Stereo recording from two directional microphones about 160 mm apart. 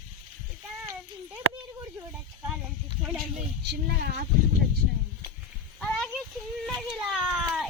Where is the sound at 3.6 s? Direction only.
90° right.